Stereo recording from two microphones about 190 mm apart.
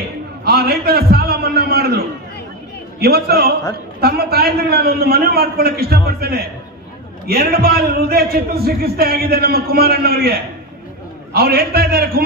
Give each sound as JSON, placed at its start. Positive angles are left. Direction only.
{"t": 0.5, "sound": "a man's voice", "side_deg": -55}